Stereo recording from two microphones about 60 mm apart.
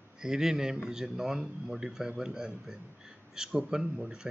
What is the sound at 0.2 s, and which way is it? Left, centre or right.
Speech, centre.